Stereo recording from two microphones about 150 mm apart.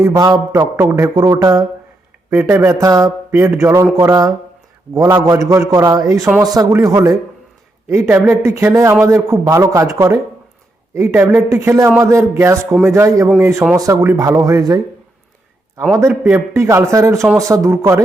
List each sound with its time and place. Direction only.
0.0 s a man's voice: 25° right (ahead or behind)
16.0 s a man's voice: 15° right (ahead or behind)